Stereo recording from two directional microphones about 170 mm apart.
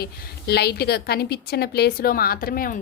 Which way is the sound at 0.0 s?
70° left (ahead or behind).